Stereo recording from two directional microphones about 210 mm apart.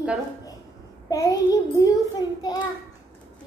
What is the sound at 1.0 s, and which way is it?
A child's voice, 15° left (ahead or behind).